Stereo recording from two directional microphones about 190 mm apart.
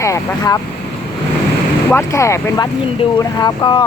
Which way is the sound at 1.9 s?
15° left (ahead or behind).